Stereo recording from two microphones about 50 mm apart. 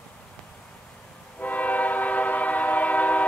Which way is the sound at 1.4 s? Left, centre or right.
Left.